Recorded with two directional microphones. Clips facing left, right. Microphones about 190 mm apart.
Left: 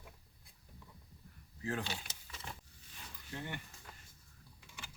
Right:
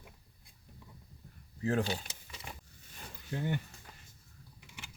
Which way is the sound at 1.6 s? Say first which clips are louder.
Right 8 dB; 40° right (ahead or behind).